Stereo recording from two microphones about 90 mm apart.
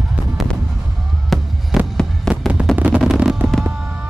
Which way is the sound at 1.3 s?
Centre (ahead or behind).